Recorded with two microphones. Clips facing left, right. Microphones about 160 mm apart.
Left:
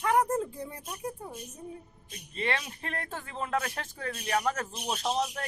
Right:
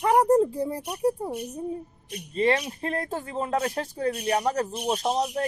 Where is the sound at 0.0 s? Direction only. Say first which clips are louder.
Right 7 dB; 30° right (ahead or behind).